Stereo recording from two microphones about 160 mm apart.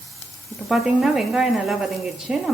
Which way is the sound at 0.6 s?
5° right (ahead or behind).